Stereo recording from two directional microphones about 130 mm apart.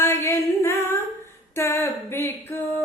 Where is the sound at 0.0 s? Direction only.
20° left (ahead or behind).